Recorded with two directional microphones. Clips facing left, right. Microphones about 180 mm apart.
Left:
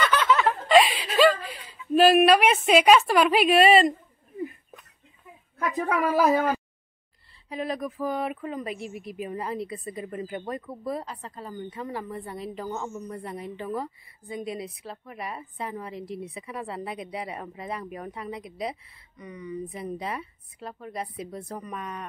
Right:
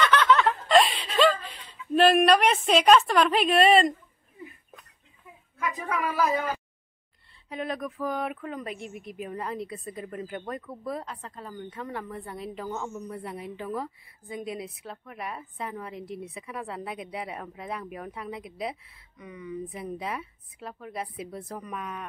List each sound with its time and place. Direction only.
0.0 s snicker: 5° left (ahead or behind)
1.5 s a woman's voice: 5° left (ahead or behind)
5.9 s speech: 50° left (ahead or behind)
7.4 s speech: centre (ahead or behind)